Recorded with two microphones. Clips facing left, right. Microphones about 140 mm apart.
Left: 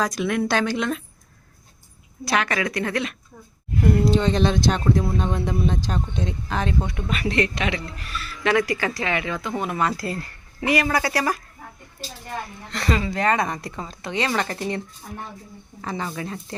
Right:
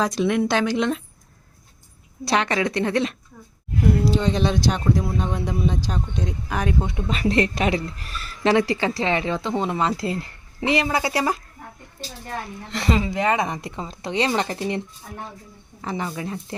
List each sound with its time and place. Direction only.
0.0 s speech: 25° right (ahead or behind)
2.2 s speech: 30° right (ahead or behind)
3.8 s speech: 5° right (ahead or behind)
7.1 s speech: 35° right (ahead or behind)
8.5 s speech: 25° right (ahead or behind)
12.7 s speech: 20° right (ahead or behind)
15.8 s speech: 20° right (ahead or behind)